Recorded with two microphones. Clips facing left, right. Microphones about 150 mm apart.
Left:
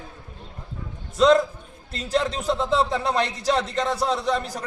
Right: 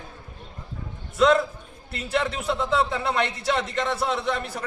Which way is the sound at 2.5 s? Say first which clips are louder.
Left 1 dB; 30° left (ahead or behind).